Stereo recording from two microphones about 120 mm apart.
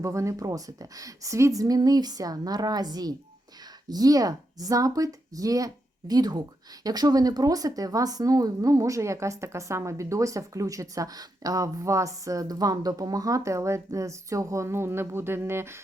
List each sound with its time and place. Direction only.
0.0 s a woman's voice: 25° right (ahead or behind)